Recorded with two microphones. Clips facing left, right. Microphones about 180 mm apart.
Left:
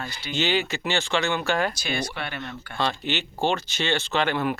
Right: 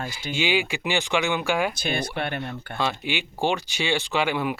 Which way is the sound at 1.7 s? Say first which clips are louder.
Right 2 dB; 55° right (ahead or behind).